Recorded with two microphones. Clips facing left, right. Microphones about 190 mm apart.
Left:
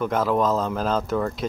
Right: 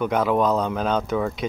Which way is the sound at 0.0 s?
Centre (ahead or behind).